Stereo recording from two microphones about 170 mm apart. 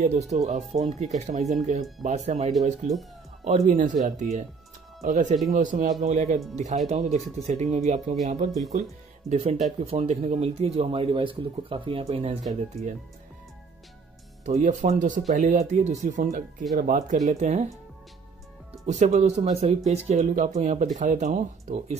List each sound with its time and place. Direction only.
0.0 s speech: 40° right (ahead or behind)
9.3 s speech: 40° right (ahead or behind)
12.8 s speech: centre (ahead or behind)
14.4 s speech: 45° right (ahead or behind)
18.7 s speech: 40° right (ahead or behind)